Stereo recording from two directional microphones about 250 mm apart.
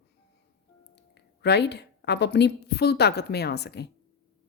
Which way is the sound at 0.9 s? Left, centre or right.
Left.